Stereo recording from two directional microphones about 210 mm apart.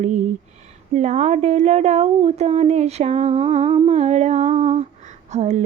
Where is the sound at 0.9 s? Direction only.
35° right (ahead or behind).